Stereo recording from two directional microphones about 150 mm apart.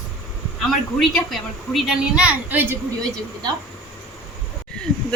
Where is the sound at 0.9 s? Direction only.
Centre (ahead or behind).